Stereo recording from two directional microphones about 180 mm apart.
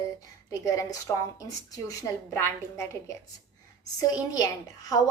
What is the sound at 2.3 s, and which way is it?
Speech, 15° left (ahead or behind).